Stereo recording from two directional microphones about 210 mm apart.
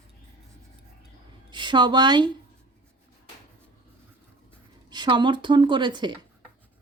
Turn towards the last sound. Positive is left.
turn(degrees=-20)  # may be behind; listen again after turning